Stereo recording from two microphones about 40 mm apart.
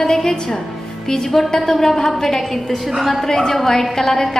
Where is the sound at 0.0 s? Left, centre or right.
Centre.